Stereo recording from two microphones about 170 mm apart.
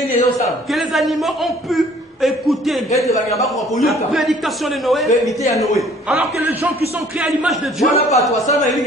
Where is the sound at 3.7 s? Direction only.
Centre (ahead or behind).